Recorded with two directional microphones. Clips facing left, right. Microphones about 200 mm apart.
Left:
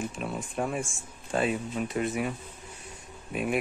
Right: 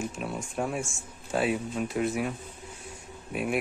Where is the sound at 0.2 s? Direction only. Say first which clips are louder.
Left 1 dB; centre (ahead or behind).